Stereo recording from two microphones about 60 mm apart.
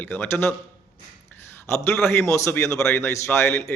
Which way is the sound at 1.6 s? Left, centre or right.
Left.